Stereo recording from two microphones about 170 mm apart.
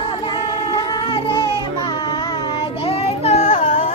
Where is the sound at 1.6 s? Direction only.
25° left (ahead or behind).